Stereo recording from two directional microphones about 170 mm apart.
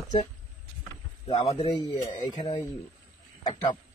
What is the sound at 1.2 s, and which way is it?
Speech, 35° left (ahead or behind).